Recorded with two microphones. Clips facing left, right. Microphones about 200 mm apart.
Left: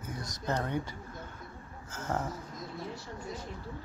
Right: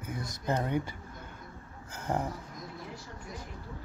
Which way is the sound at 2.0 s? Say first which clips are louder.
Right 2 dB; 10° right (ahead or behind).